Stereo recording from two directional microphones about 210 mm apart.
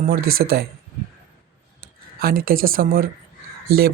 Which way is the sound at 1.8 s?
45° right (ahead or behind).